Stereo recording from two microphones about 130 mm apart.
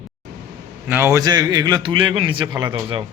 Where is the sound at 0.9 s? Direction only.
20° right (ahead or behind).